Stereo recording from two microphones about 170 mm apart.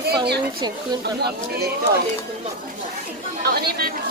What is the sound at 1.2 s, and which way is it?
Speech, 70° right (ahead or behind).